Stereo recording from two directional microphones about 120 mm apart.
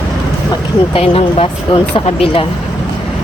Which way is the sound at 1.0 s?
50° left (ahead or behind).